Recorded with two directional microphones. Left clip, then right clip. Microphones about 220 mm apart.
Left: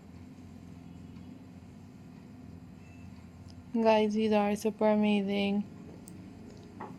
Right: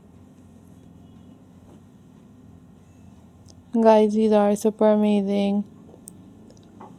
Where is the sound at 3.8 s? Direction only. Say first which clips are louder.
Right 10 dB; 40° right (ahead or behind).